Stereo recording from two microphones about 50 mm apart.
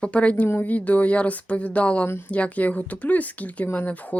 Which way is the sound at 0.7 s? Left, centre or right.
Left.